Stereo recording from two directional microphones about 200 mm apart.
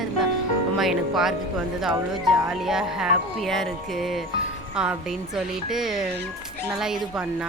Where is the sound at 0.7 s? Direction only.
Centre (ahead or behind).